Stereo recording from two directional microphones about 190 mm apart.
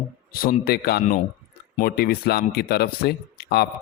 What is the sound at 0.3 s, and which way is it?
Speech, 50° left (ahead or behind).